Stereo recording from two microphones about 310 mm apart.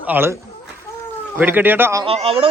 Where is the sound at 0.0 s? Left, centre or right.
Centre.